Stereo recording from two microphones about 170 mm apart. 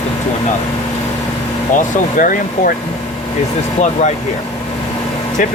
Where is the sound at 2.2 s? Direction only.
55° left (ahead or behind).